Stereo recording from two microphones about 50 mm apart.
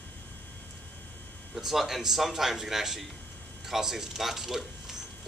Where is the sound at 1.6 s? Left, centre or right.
Centre.